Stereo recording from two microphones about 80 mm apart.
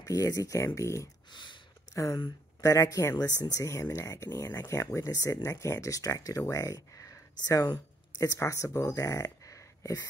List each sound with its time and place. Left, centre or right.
0.0 s speech: left
1.3 s a sound: left
2.6 s speech: left
3.2 s speech: left
8.4 s speech: left